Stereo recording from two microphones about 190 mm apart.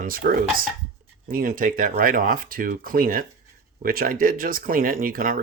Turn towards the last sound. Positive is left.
turn(degrees=-45)  # may be behind; listen again after turning